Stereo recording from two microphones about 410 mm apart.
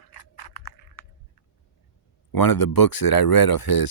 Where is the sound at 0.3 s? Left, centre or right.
Left.